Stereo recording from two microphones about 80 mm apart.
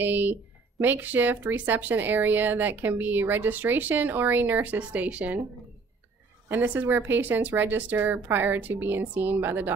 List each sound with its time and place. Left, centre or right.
0.0 s speech: right
6.5 s speech: right